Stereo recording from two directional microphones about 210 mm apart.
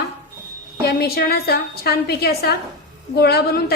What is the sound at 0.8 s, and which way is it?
A woman's voice, 50° left (ahead or behind).